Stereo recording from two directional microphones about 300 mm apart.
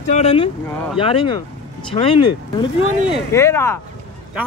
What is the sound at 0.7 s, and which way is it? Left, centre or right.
Speech, centre.